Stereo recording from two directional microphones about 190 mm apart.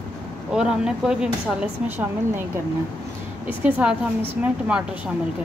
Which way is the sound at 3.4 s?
10° right (ahead or behind).